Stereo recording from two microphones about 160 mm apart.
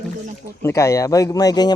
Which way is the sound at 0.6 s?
15° left (ahead or behind).